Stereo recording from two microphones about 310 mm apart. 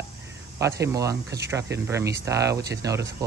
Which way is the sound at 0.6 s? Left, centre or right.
Centre.